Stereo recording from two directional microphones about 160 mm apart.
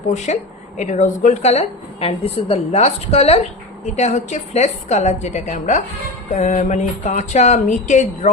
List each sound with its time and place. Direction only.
0.1 s a woman's voice: 45° left (ahead or behind)